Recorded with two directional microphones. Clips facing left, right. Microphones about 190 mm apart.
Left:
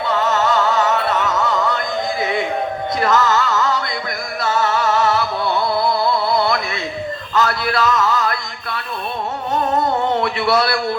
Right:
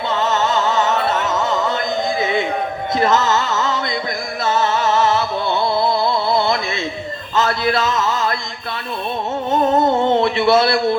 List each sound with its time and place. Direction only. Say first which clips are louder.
0.1 s music: left 1 dB; 25° right (ahead or behind)
3.0 s music: even; 25° right (ahead or behind)
7.3 s a sound: right 1 dB; 25° right (ahead or behind)
10.1 s a man's voice: right 4 dB; 25° right (ahead or behind)